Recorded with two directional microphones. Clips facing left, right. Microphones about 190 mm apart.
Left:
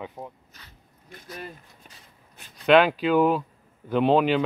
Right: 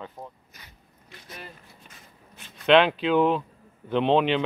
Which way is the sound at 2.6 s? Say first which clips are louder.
Left 1 dB; 5° left (ahead or behind).